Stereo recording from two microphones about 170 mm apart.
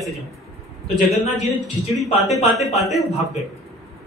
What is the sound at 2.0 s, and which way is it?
Speech, 40° left (ahead or behind).